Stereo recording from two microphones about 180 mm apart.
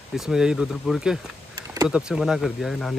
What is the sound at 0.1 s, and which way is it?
Speech, 5° right (ahead or behind).